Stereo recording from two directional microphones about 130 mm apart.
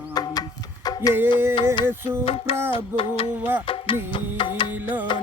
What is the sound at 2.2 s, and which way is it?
Music, 45° left (ahead or behind).